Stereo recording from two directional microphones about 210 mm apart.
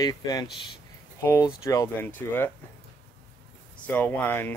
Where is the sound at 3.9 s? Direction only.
10° left (ahead or behind).